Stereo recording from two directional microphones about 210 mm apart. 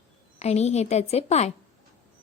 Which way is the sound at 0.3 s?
30° left (ahead or behind).